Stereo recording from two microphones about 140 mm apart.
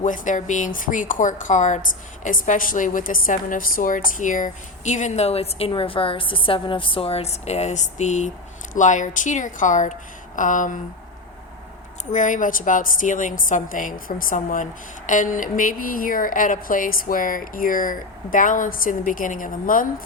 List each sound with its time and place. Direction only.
0.0 s a woman's voice: 65° left (ahead or behind)
12.1 s a woman's voice: 65° left (ahead or behind)